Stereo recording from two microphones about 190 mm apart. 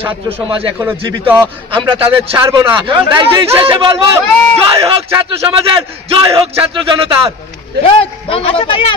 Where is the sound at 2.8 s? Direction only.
25° right (ahead or behind).